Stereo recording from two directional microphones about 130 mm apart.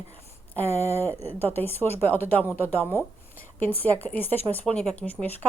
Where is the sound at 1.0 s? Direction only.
15° left (ahead or behind).